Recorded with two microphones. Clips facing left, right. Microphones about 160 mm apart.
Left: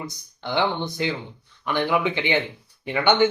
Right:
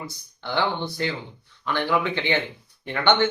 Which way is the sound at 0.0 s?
15° left (ahead or behind).